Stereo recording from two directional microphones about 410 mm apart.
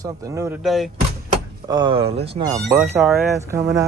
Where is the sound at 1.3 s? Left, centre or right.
Centre.